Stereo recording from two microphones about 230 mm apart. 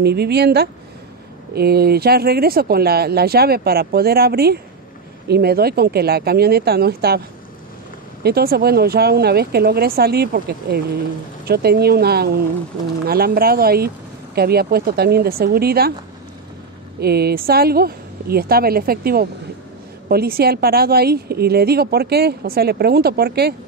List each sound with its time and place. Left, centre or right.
0.0 s speech: right
8.2 s speech: right
17.0 s speech: right